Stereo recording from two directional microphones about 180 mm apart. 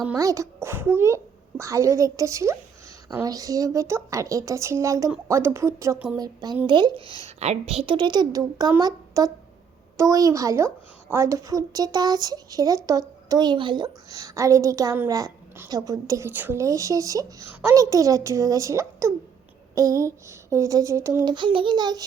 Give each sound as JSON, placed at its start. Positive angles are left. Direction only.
{"t": 0.2, "sound": "a child's voice", "side_deg": -20}